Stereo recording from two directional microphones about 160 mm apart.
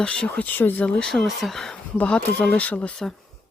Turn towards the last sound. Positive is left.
turn(degrees=5)  # may be behind; listen again after turning